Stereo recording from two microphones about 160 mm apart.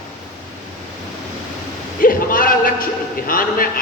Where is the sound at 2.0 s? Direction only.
60° left (ahead or behind).